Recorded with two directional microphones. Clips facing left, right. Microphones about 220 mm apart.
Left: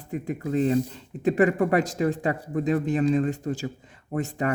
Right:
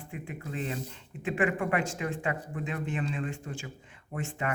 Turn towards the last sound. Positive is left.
turn(degrees=40)  # may be behind; listen again after turning